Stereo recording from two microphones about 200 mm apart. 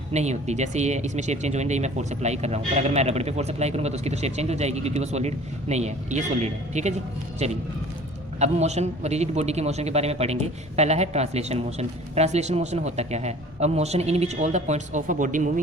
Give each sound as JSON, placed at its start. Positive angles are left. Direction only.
{"t": 0.1, "sound": "a man's voice", "side_deg": -35}